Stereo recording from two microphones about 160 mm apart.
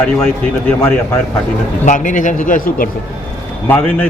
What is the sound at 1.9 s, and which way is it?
A man's voice, 55° left (ahead or behind).